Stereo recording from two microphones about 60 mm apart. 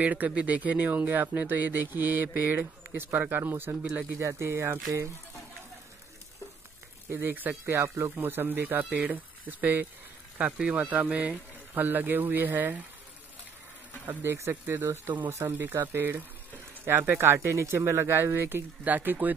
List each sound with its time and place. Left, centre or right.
0.0 s speech: right
7.1 s speech: right
8.2 s speech: right; by 11.3 s centre
11.7 s speech: right
14.2 s speech: right
17.3 s speech: right